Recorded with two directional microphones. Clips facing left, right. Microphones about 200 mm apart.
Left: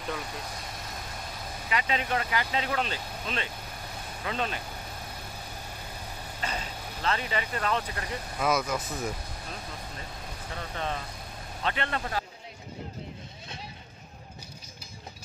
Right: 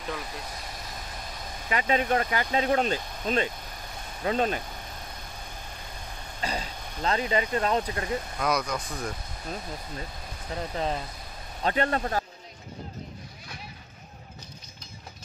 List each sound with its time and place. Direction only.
0.0 s speech: centre (ahead or behind)
1.7 s speech: 45° right (ahead or behind)
7.1 s speech: 30° right (ahead or behind)
8.4 s speech: 5° left (ahead or behind)
10.5 s speech: 30° right (ahead or behind)